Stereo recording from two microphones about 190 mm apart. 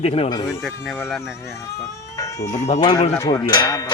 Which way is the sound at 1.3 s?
15° left (ahead or behind).